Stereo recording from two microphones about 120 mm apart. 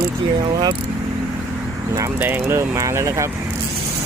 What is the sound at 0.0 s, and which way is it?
Speech, 40° right (ahead or behind).